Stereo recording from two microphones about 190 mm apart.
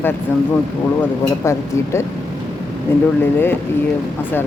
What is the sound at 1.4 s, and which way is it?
Speech, 15° left (ahead or behind).